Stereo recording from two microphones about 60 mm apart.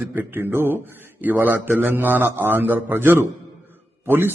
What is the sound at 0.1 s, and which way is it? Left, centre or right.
A man's voice, right.